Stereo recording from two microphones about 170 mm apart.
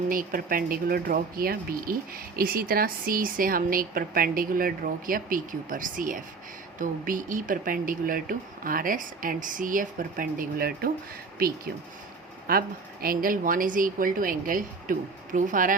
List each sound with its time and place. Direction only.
0.1 s speech: 55° right (ahead or behind)